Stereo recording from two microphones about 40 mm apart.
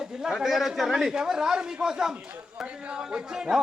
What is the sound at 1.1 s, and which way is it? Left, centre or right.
Speech, centre.